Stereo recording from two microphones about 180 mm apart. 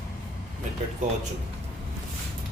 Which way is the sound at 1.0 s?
45° right (ahead or behind).